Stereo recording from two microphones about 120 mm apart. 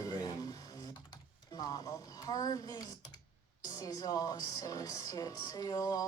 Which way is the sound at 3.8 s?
30° left (ahead or behind).